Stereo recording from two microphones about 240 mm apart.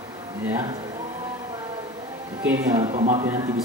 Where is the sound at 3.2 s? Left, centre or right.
Centre.